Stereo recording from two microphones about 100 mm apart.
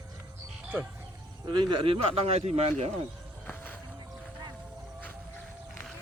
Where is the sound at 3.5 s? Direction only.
20° left (ahead or behind).